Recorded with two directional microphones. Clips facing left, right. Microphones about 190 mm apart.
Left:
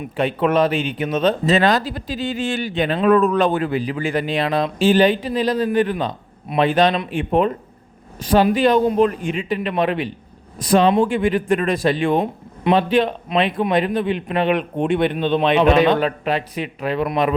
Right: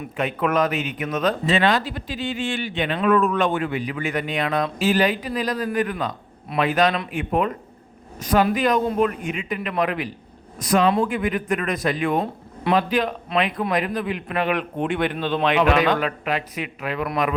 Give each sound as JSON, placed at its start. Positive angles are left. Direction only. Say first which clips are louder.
{"t": 0.2, "sound": "speech", "louder": "left 4 dB", "side_deg": 30}
{"t": 1.5, "sound": "a man's voice", "louder": "left 3 dB", "side_deg": 40}